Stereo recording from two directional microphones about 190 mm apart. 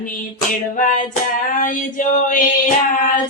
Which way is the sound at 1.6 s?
45° left (ahead or behind).